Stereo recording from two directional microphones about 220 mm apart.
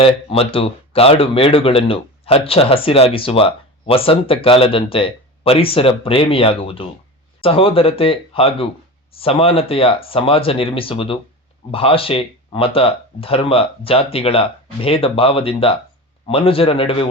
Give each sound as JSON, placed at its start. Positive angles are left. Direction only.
{"t": 0.0, "sound": "speech", "side_deg": 25}